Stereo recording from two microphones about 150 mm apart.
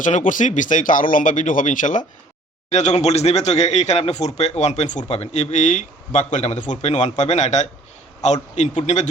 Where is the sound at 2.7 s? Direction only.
50° left (ahead or behind).